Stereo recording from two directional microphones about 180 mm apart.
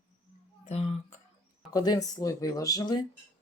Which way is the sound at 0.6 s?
35° left (ahead or behind).